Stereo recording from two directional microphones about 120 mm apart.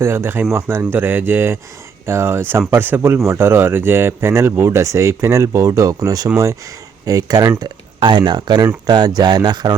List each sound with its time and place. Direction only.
0.0 s speech: 20° right (ahead or behind)
7.6 s speech: 45° right (ahead or behind)